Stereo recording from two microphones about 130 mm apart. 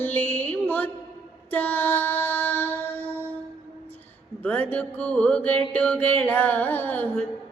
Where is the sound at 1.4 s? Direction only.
15° left (ahead or behind).